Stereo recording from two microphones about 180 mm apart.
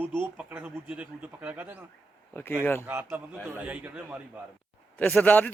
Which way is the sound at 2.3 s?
10° left (ahead or behind).